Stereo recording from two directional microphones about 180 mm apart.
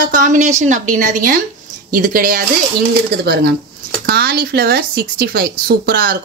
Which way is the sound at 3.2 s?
65° right (ahead or behind).